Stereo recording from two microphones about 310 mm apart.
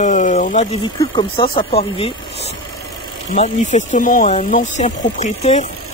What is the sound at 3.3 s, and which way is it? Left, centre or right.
Speech, left.